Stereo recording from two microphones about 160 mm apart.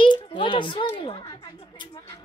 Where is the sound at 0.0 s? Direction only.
30° left (ahead or behind).